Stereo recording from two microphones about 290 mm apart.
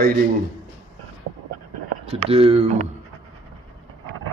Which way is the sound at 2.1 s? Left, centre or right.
Right.